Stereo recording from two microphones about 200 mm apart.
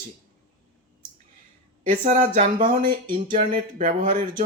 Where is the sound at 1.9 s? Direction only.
35° right (ahead or behind).